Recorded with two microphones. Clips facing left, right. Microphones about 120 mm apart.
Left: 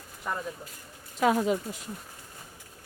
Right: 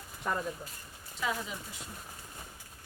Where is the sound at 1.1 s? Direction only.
55° left (ahead or behind).